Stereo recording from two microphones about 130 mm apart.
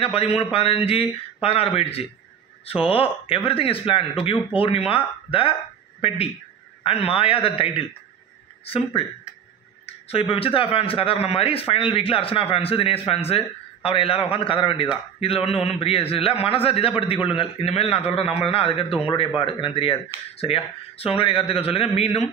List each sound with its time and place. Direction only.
0.0 s a man's voice: 50° left (ahead or behind)
9.8 s a sound: 50° left (ahead or behind)
10.3 s a man's voice: 45° left (ahead or behind)